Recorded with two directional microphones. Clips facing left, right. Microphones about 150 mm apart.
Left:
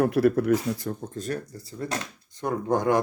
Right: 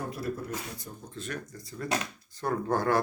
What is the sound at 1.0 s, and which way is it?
Speech, 45° left (ahead or behind).